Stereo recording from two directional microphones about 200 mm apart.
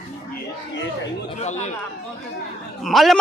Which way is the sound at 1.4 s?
35° left (ahead or behind).